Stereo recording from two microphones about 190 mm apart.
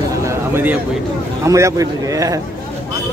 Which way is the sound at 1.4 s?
15° right (ahead or behind).